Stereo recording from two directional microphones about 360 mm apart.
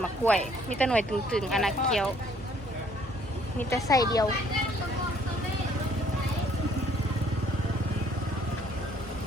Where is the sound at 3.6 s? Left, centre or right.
Centre.